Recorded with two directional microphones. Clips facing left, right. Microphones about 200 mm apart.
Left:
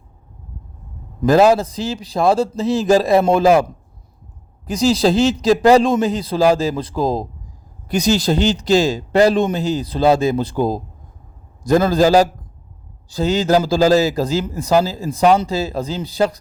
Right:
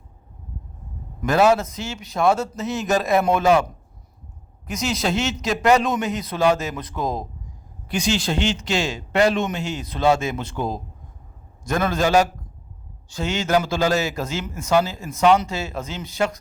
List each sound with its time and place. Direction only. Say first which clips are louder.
1.2 s a man's voice: left 5 dB; 35° left (ahead or behind)